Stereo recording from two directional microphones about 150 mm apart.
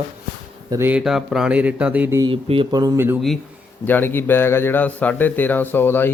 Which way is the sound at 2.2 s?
35° right (ahead or behind).